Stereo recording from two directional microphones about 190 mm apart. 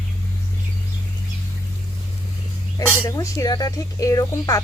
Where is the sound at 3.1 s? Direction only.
15° left (ahead or behind).